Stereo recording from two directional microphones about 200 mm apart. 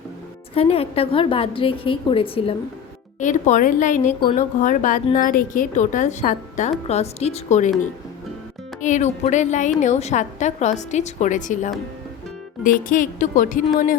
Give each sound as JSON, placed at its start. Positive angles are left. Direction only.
{"t": 0.5, "sound": "a woman's voice", "side_deg": 30}
{"t": 3.2, "sound": "a woman's voice", "side_deg": 40}
{"t": 8.8, "sound": "a woman's voice", "side_deg": 35}